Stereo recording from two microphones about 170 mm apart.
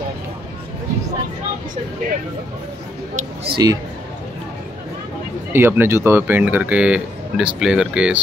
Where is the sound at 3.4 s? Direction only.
25° right (ahead or behind).